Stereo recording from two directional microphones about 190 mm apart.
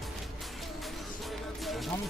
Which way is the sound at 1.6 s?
Centre (ahead or behind).